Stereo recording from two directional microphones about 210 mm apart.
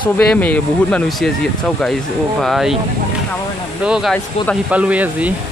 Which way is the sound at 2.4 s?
Centre (ahead or behind).